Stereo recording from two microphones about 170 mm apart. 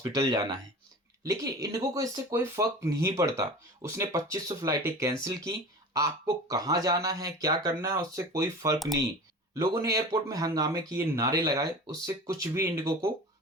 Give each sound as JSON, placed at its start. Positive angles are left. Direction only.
{"t": 0.0, "sound": "speech", "side_deg": -20}